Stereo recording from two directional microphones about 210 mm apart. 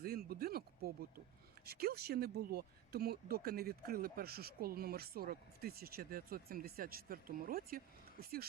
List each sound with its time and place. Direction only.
0.0 s speech: 45° right (ahead or behind)